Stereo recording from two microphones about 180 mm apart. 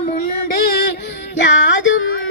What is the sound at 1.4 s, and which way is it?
Music, 85° left.